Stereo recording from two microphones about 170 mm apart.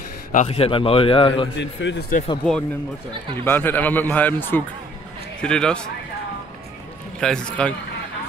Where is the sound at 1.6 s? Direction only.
90° left.